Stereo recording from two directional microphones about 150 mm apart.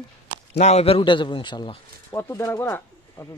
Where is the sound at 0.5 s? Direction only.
45° left (ahead or behind).